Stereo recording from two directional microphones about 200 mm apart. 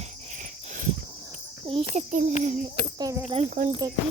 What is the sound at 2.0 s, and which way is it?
Insect, 35° right (ahead or behind).